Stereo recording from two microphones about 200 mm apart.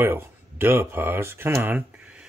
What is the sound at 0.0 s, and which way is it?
Speech, 10° right (ahead or behind).